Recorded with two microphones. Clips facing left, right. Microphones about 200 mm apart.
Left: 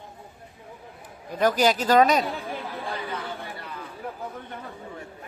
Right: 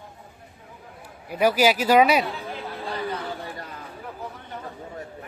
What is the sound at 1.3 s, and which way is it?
Speech, 10° right (ahead or behind).